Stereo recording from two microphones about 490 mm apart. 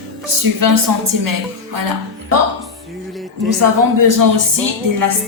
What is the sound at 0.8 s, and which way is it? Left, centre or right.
Speech, right.